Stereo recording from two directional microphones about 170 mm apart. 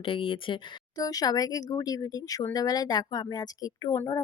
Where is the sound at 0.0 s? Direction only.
30° left (ahead or behind).